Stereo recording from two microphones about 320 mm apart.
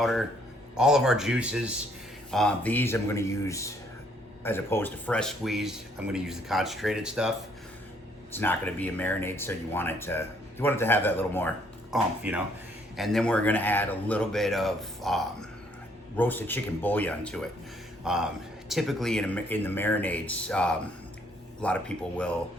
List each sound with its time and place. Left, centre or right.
0.0 s a man's voice: centre